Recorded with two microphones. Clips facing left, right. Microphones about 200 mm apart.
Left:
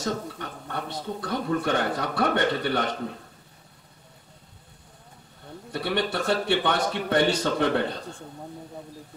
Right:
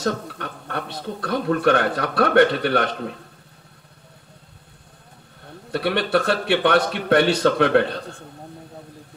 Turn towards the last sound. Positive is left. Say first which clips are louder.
# right 6 dB
turn(degrees=-75)  # may be behind; listen again after turning